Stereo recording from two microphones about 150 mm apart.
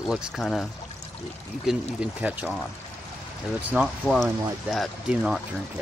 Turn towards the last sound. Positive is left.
turn(degrees=0)  # may be behind; listen again after turning